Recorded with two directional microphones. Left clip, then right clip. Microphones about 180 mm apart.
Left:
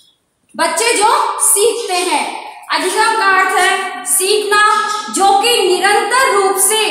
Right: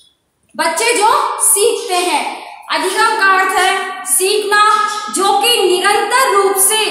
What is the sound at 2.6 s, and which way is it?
A woman's voice, 20° right (ahead or behind).